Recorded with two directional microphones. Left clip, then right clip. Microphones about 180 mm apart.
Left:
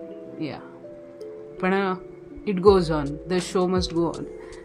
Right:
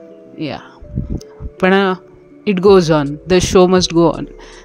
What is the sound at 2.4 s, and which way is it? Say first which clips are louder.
Speech: right 8 dB; 40° right (ahead or behind).